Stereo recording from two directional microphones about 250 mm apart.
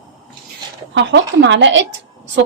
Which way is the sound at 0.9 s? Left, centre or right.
Right.